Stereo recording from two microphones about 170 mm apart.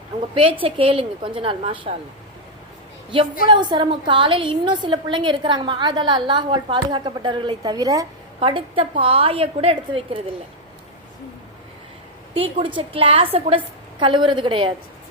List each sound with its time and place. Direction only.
0.6 s a woman's voice: 30° right (ahead or behind)
3.4 s a woman's voice: 25° right (ahead or behind)
12.3 s a woman's voice: 35° right (ahead or behind)